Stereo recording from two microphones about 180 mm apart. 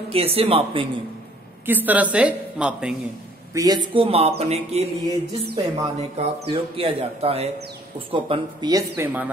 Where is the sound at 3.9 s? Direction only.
30° right (ahead or behind).